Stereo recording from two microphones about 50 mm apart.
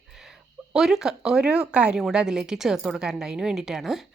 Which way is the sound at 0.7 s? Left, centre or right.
Centre.